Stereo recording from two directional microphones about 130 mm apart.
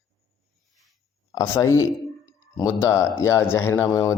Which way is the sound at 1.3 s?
25° left (ahead or behind).